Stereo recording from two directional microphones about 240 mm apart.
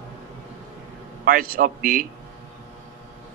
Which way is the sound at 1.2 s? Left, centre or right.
Right.